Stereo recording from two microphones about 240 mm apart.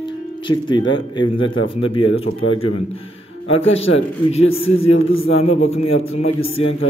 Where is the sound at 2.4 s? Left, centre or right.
Left.